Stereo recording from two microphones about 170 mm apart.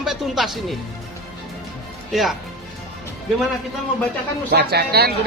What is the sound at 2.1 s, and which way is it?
Speech, centre (ahead or behind).